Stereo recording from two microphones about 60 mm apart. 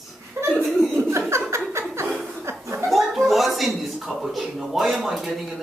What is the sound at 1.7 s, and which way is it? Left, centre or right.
Chuckle, right.